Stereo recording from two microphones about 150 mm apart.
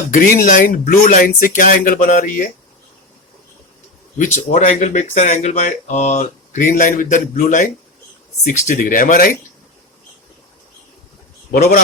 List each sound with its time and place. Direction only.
0.1 s speech: 60° left (ahead or behind)
4.4 s speech: 50° left (ahead or behind)
8.4 s speech: 70° left (ahead or behind)
11.5 s speech: 80° left